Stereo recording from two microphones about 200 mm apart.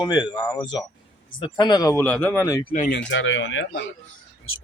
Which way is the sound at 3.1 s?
75° left (ahead or behind).